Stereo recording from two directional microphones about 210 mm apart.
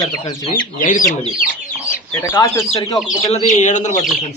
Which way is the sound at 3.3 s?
35° left (ahead or behind).